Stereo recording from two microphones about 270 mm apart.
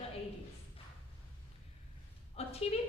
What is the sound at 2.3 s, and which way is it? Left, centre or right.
Speech, left.